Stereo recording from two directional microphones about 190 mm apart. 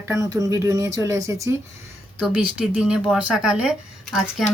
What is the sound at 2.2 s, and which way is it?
Speech, 5° right (ahead or behind).